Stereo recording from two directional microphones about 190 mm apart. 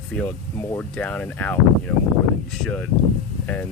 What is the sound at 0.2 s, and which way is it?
Speech, 10° left (ahead or behind).